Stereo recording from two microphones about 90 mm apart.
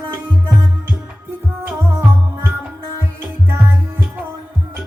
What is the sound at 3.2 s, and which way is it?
Music, 25° right (ahead or behind).